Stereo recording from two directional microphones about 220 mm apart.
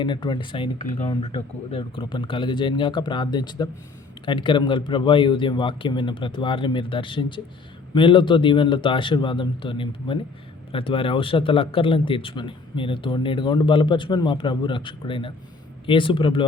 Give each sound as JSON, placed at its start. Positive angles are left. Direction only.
{"t": 0.0, "sound": "speech", "side_deg": 20}